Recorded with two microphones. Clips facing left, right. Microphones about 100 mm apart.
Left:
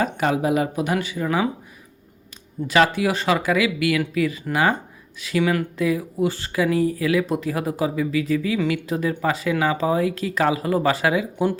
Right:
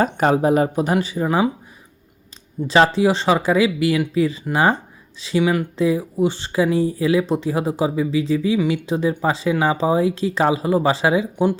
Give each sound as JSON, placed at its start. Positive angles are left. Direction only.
{"t": 0.0, "sound": "speech", "side_deg": -40}
{"t": 2.6, "sound": "speech", "side_deg": -30}
{"t": 5.4, "sound": "speech", "side_deg": -15}
{"t": 5.7, "sound": "speech", "side_deg": -25}